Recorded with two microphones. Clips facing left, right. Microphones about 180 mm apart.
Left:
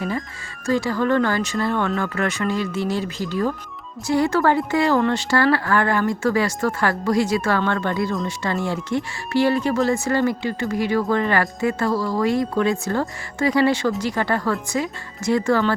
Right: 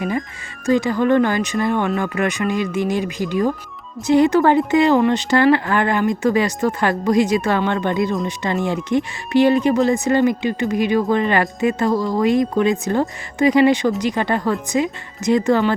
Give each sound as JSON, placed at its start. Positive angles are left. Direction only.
{"t": 0.6, "sound": "a woman's voice", "side_deg": -20}